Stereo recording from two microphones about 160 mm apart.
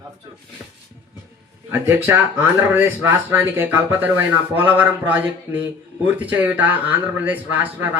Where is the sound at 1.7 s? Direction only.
15° right (ahead or behind).